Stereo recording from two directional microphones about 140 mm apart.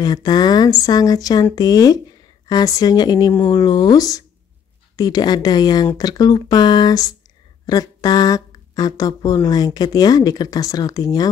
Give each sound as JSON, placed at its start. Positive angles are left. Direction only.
{"t": 0.0, "sound": "speech", "side_deg": 30}